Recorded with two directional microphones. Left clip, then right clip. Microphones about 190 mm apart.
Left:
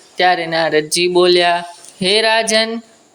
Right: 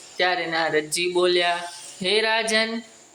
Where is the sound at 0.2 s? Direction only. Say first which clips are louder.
Left 8 dB; 30° left (ahead or behind).